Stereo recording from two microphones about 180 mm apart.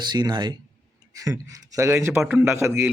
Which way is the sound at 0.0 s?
25° right (ahead or behind).